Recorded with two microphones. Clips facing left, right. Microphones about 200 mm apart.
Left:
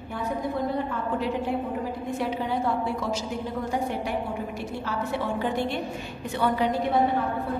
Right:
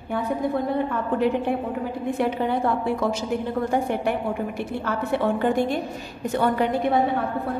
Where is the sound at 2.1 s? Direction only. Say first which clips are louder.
Right 4 dB; 55° right (ahead or behind).